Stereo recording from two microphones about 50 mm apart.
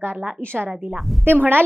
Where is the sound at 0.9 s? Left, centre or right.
Centre.